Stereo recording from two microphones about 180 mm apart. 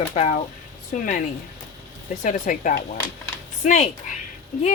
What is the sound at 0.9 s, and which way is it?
Speech, 50° left (ahead or behind).